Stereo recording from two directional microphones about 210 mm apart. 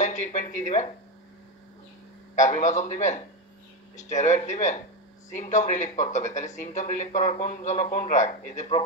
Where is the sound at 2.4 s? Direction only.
35° left (ahead or behind).